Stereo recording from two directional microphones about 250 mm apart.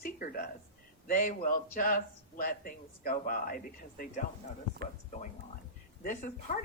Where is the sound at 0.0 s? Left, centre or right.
Left.